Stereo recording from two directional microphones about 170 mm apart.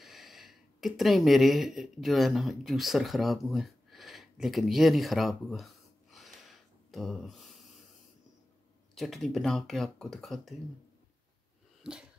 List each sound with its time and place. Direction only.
0.0 s speech: centre (ahead or behind)
8.9 s speech: centre (ahead or behind)
11.8 s dog: 5° right (ahead or behind)